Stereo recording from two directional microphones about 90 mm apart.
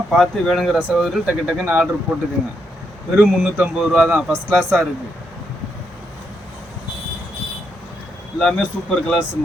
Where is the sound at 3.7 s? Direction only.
5° right (ahead or behind).